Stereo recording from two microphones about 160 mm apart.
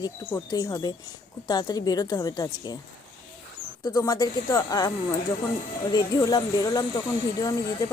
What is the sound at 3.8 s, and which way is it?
Speech, 20° left (ahead or behind).